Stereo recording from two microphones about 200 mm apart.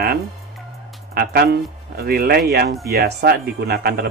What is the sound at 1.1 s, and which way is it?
Speech, 50° right (ahead or behind).